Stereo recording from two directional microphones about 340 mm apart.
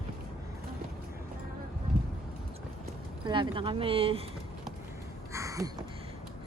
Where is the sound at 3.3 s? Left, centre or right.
Centre.